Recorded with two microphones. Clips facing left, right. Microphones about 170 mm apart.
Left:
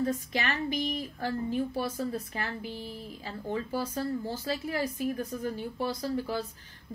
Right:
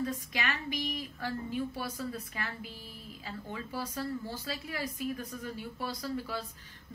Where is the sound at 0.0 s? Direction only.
35° left (ahead or behind).